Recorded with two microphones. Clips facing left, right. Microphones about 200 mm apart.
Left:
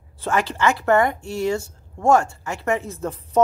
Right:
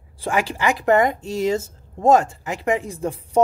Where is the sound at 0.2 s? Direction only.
10° right (ahead or behind).